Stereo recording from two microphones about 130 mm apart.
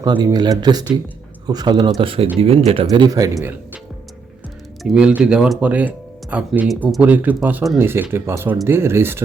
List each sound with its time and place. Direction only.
0.0 s speech: 30° right (ahead or behind)
3.1 s speech: 25° right (ahead or behind)
4.8 s speech: 5° right (ahead or behind)